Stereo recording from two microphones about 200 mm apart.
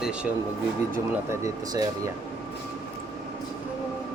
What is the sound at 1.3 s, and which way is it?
Speech, 15° right (ahead or behind).